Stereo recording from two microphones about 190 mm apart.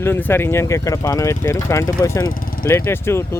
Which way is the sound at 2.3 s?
50° left (ahead or behind).